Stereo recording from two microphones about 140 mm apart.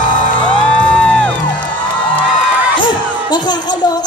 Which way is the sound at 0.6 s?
10° left (ahead or behind).